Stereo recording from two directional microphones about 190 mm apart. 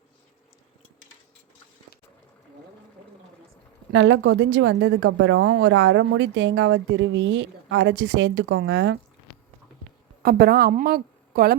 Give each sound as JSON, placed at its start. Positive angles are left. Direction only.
{"t": 3.9, "sound": "a woman's voice", "side_deg": -80}
{"t": 10.2, "sound": "a woman's voice", "side_deg": -55}